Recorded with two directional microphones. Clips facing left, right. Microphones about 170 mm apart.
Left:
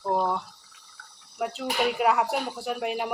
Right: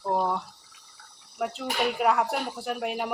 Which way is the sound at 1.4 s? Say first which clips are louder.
Left 1 dB; centre (ahead or behind).